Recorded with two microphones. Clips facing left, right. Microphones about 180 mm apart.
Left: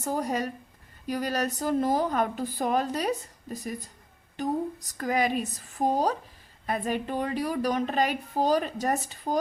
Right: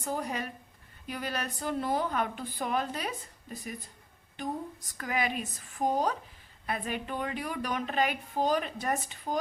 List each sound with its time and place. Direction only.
0.0 s speech: 40° left (ahead or behind)